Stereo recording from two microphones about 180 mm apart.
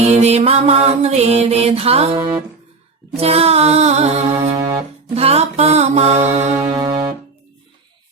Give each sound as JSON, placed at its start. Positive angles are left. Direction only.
{"t": 0.0, "sound": "music", "side_deg": -35}
{"t": 2.1, "sound": "music", "side_deg": -20}
{"t": 3.2, "sound": "music", "side_deg": -35}
{"t": 4.5, "sound": "music", "side_deg": -20}
{"t": 5.1, "sound": "music", "side_deg": -35}
{"t": 6.7, "sound": "music", "side_deg": -25}